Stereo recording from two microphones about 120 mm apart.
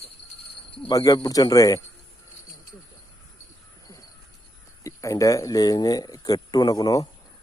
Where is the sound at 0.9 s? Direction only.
30° left (ahead or behind).